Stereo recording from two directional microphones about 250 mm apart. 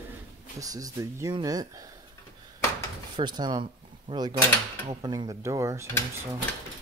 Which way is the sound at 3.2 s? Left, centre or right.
Centre.